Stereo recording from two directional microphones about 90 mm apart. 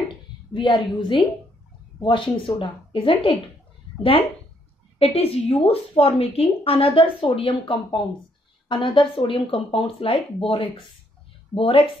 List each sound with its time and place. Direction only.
0.5 s a woman's voice: 65° left (ahead or behind); by 3.3 s 85° left
4.9 s a woman's voice: 90° left